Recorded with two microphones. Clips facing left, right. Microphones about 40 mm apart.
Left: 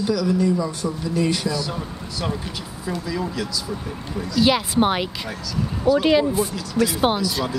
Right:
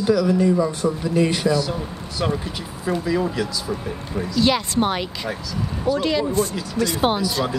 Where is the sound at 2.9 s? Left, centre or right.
Right.